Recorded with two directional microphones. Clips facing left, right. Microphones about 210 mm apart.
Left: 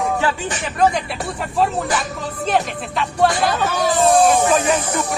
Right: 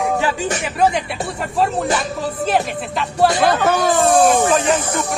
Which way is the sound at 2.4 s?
5° right (ahead or behind).